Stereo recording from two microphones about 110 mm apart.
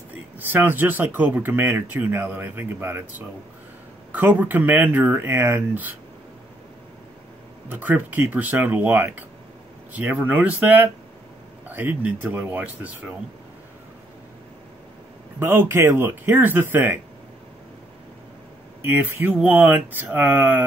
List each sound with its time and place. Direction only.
0.5 s speech: 15° right (ahead or behind)
7.6 s speech: 15° right (ahead or behind)
15.3 s speech: 20° right (ahead or behind)
18.8 s speech: 20° right (ahead or behind)